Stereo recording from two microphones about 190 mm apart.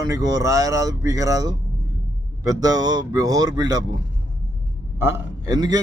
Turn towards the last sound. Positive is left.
turn(degrees=-20)  # may be behind; listen again after turning